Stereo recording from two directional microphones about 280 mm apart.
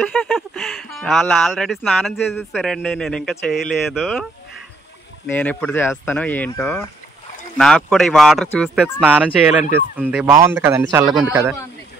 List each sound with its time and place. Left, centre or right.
0.0 s speech: centre